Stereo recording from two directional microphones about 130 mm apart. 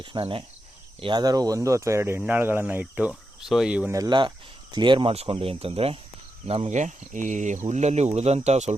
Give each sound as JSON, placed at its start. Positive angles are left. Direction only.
{"t": 0.0, "sound": "cricket", "side_deg": -40}
{"t": 1.0, "sound": "speech", "side_deg": -30}
{"t": 3.9, "sound": "cricket", "side_deg": -30}
{"t": 4.7, "sound": "speech", "side_deg": -35}
{"t": 6.5, "sound": "speech", "side_deg": -70}